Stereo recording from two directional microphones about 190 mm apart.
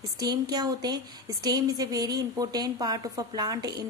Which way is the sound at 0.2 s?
20° right (ahead or behind).